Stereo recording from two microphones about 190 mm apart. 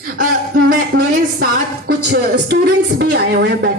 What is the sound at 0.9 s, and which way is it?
A woman's voice, 55° right (ahead or behind).